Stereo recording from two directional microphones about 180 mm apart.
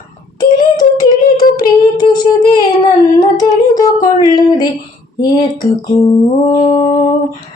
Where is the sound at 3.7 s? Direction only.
20° left (ahead or behind).